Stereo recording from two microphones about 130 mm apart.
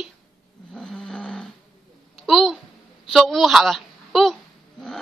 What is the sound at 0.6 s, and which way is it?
Snoring, 5° left (ahead or behind).